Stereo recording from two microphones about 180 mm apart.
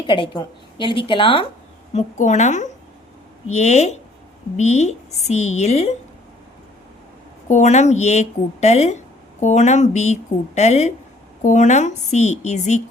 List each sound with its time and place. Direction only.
0.1 s a woman's voice: 25° left (ahead or behind)
7.4 s a woman's voice: 40° left (ahead or behind)